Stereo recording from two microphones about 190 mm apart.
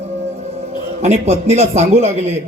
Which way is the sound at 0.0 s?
35° right (ahead or behind).